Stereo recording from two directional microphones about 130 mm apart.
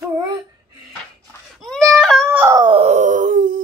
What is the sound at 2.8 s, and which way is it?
Wail, 65° right (ahead or behind).